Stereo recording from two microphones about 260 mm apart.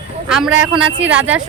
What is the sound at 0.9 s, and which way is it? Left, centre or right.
Speech, right.